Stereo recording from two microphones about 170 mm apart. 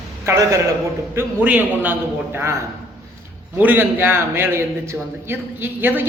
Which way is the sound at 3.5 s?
10° right (ahead or behind).